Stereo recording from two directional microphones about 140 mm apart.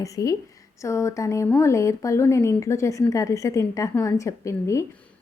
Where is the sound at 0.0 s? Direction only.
25° left (ahead or behind).